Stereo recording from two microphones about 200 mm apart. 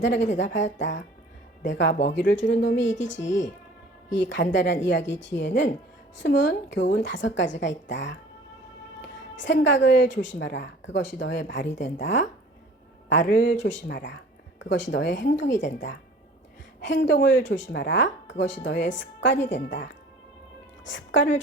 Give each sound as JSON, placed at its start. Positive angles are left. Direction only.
{"t": 0.0, "sound": "a woman's voice", "side_deg": 65}
{"t": 16.8, "sound": "a woman's voice", "side_deg": 65}